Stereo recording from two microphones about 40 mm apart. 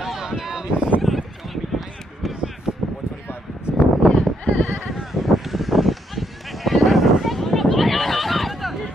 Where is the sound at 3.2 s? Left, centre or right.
Left.